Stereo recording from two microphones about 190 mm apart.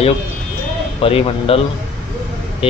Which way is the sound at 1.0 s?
30° left (ahead or behind).